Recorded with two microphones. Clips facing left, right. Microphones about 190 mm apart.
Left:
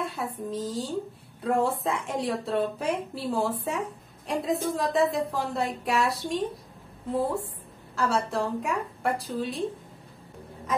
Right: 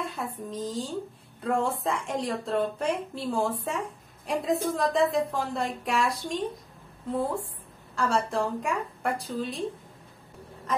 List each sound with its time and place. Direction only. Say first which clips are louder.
0.0 s a woman's voice: left 2 dB; centre (ahead or behind)
7.9 s a woman's voice: even; centre (ahead or behind)